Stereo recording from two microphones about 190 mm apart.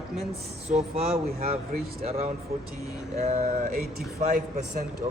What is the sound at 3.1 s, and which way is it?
Speech, 35° right (ahead or behind).